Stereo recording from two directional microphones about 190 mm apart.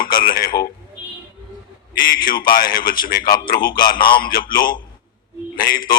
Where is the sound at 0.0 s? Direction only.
50° left (ahead or behind).